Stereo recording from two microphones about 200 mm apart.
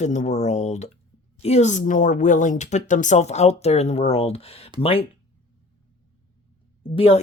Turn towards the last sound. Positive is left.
turn(degrees=30)  # may be behind; listen again after turning